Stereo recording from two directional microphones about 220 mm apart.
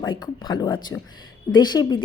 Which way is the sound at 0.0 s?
20° left (ahead or behind).